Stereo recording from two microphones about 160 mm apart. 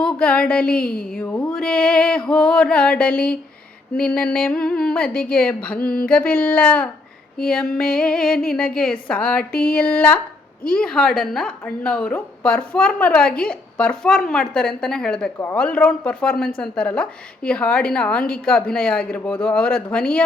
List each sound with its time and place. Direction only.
0.0 s a woman's voice: 5° left (ahead or behind)
0.8 s speech: 70° left (ahead or behind)
1.1 s a woman's voice: 10° left (ahead or behind)